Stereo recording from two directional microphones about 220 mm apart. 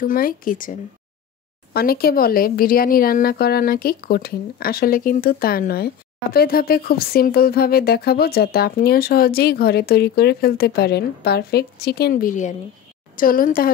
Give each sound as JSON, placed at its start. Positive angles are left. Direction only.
{"t": 0.0, "sound": "speech", "side_deg": 40}